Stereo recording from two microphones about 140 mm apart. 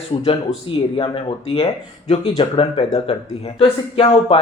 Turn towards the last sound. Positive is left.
turn(degrees=40)  # may be behind; listen again after turning